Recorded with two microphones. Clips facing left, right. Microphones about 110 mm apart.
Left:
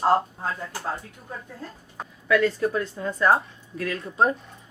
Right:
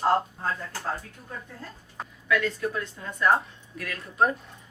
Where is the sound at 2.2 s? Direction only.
35° left (ahead or behind).